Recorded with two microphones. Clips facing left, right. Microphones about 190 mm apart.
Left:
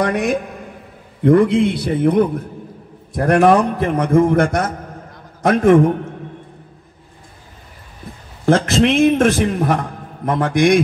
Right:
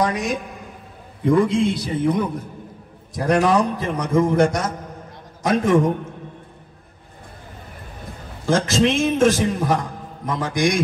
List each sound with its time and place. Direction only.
0.0 s a man's voice: 60° left (ahead or behind)
8.5 s a man's voice: 60° left (ahead or behind)